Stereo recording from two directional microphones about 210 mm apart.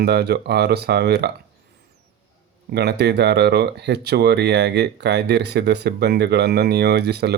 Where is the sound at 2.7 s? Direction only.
50° right (ahead or behind).